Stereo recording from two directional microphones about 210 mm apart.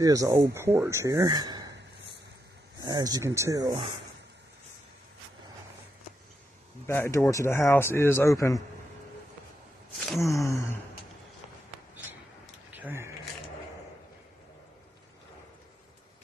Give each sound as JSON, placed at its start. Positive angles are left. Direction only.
{"t": 0.0, "sound": "speech", "side_deg": -15}
{"t": 2.8, "sound": "speech", "side_deg": -20}
{"t": 6.9, "sound": "a man's voice", "side_deg": 10}
{"t": 9.9, "sound": "speech", "side_deg": 0}
{"t": 12.7, "sound": "a sound", "side_deg": -10}